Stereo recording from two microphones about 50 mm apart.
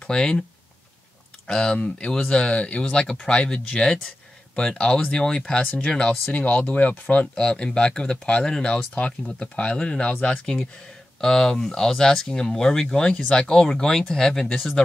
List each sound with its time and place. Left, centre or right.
0.0 s speech: centre
1.5 s speech: centre
6.2 s speech: left
7.3 s speech: centre